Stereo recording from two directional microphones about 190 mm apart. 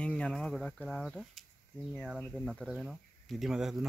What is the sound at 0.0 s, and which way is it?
Speech, 5° left (ahead or behind).